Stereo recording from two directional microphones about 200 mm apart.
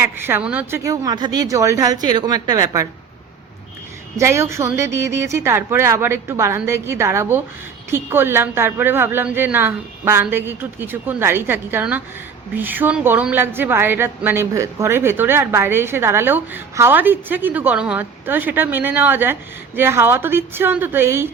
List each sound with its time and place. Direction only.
0.0 s a woman's voice: 10° right (ahead or behind)
4.2 s a woman's voice: 15° right (ahead or behind)